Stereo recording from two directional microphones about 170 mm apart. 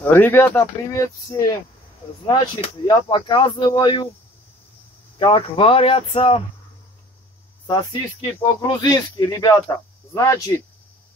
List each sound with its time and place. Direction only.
0.0 s speech: 10° left (ahead or behind)
2.9 s speech: 30° left (ahead or behind)
5.2 s speech: 30° left (ahead or behind)
7.6 s speech: 25° left (ahead or behind)